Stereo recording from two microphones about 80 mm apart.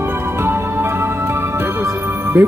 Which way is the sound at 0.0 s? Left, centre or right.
Right.